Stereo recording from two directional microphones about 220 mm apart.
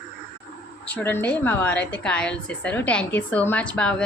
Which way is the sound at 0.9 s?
10° left (ahead or behind).